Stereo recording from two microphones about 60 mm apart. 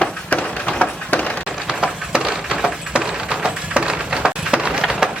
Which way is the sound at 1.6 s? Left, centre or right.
Centre.